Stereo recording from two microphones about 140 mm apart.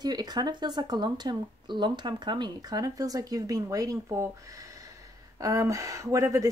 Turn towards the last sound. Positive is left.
turn(degrees=-20)  # may be behind; listen again after turning